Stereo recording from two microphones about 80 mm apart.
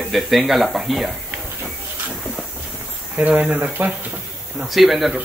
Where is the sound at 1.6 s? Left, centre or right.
Centre.